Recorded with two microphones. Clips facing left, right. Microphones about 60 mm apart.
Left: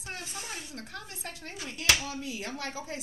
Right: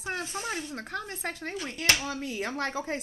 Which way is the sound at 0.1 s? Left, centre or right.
Right.